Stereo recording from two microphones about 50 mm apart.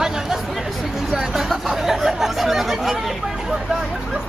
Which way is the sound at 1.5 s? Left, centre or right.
Centre.